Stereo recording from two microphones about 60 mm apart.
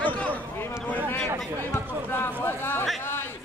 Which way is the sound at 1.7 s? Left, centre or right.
Left.